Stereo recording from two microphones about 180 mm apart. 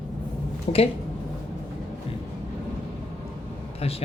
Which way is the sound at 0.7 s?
35° left (ahead or behind).